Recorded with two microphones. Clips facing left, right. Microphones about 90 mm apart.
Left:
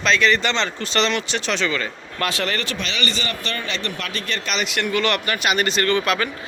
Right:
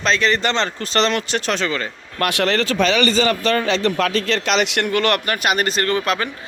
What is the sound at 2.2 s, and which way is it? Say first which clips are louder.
Speech: right 5 dB; 65° right (ahead or behind).